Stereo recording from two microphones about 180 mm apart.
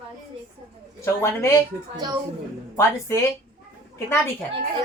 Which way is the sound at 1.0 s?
15° left (ahead or behind).